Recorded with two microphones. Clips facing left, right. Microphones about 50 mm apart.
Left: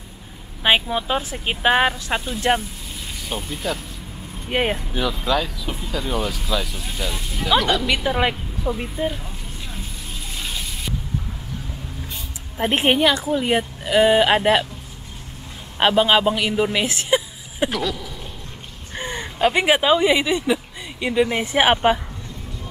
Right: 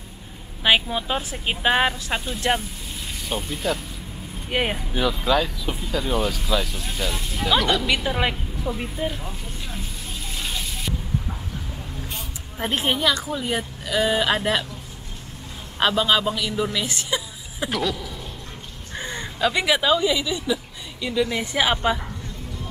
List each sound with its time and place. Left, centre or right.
0.7 s speech: centre
9.2 s vehicle: centre
12.7 s speech: left
15.8 s a man's voice: left
17.6 s speech: centre
18.9 s speech: left